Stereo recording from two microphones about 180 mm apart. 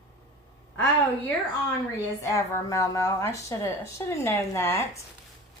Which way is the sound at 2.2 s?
15° left (ahead or behind).